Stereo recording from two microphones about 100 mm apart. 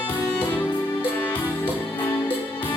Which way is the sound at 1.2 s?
20° left (ahead or behind).